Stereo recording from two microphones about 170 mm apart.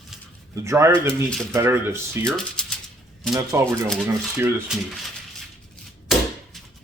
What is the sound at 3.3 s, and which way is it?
Speech, 20° right (ahead or behind).